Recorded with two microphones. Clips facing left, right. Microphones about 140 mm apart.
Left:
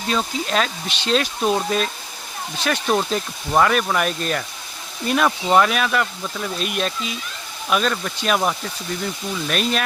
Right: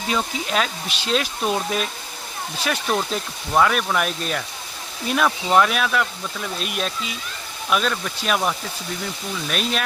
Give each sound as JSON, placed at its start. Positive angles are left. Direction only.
{"t": 0.1, "sound": "speech", "side_deg": -5}
{"t": 9.5, "sound": "speech", "side_deg": 0}